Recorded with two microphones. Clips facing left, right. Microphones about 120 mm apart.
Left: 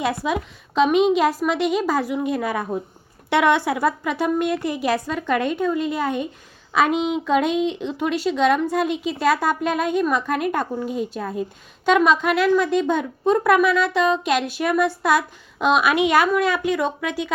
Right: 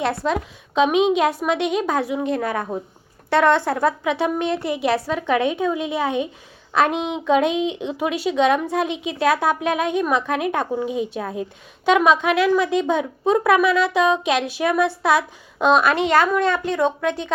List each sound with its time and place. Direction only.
0.0 s a woman's voice: 5° left (ahead or behind)